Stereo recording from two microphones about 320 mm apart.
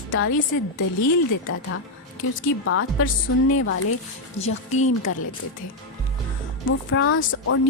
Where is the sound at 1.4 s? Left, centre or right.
Left.